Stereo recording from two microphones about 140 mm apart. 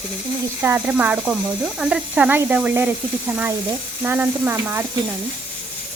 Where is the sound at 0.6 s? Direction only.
15° right (ahead or behind).